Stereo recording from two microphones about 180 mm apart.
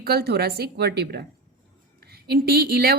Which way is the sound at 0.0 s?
60° right (ahead or behind).